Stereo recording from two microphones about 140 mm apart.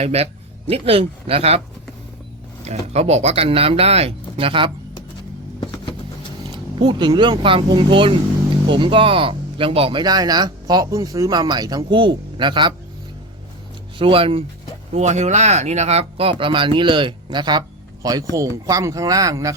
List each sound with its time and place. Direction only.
0.0 s speech: 50° right (ahead or behind)
2.6 s speech: 50° right (ahead or behind)
5.5 s music: 35° left (ahead or behind)
6.5 s speech: 35° right (ahead or behind)
14.0 s speech: 40° right (ahead or behind)
14.9 s speech: 55° right (ahead or behind); by 19.5 s 25° right (ahead or behind)